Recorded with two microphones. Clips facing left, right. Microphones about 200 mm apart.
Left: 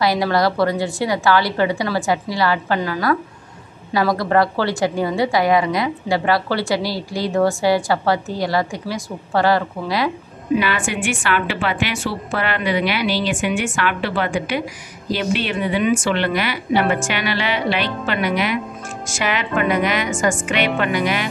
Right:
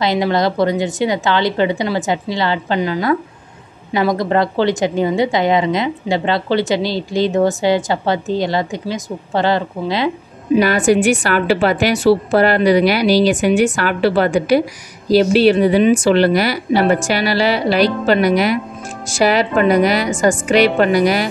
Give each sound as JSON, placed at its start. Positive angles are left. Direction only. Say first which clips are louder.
{"t": 0.0, "sound": "a woman's voice", "louder": "right 2 dB", "side_deg": -20}
{"t": 10.6, "sound": "a woman's voice", "louder": "right 9 dB", "side_deg": -40}